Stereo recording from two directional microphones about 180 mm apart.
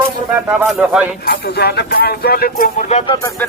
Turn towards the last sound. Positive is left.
turn(degrees=20)  # may be behind; listen again after turning